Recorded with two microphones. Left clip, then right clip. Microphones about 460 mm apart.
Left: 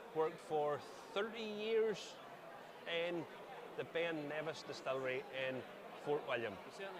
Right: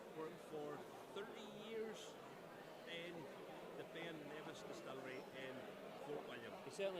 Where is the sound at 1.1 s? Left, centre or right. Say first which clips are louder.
Left 12 dB; left.